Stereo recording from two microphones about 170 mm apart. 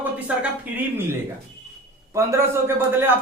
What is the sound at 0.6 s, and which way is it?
Speech, 15° right (ahead or behind).